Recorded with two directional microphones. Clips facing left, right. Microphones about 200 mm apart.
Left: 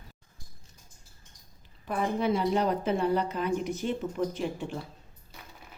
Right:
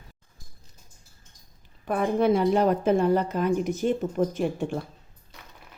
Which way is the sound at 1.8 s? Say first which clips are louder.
Right 6 dB; 55° right (ahead or behind).